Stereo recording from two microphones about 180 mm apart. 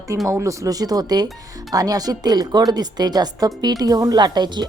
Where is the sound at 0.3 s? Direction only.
15° right (ahead or behind).